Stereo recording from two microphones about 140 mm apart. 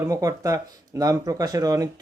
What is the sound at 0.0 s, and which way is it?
Speech, 25° right (ahead or behind).